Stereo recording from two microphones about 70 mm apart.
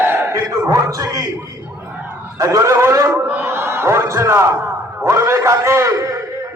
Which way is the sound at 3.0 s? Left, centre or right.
Right.